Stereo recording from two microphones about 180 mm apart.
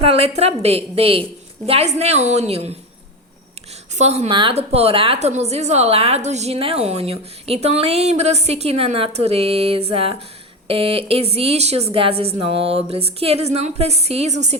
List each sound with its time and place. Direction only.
0.0 s a woman's voice: 35° right (ahead or behind)
3.9 s a woman's voice: 40° right (ahead or behind)